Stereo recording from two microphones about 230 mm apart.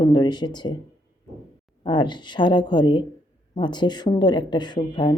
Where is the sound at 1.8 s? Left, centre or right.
Left.